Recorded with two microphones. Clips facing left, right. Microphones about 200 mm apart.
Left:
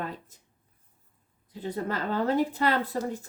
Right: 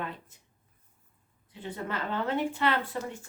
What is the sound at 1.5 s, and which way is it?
Speech, 40° left (ahead or behind).